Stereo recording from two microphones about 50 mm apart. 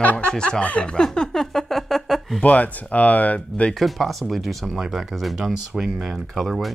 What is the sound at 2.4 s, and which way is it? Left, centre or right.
Speech, left.